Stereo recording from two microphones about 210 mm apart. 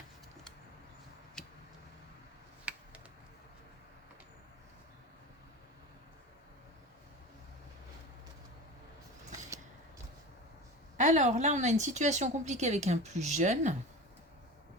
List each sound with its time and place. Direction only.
10.9 s a woman's voice: 35° right (ahead or behind)